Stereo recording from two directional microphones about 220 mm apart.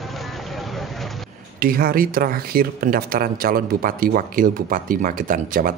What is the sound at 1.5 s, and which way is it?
Speech, 40° right (ahead or behind).